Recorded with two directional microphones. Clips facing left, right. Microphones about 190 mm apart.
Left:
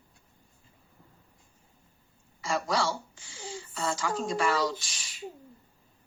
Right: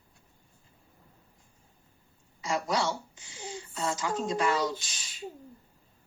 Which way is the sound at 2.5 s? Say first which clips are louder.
Even; 20° right (ahead or behind).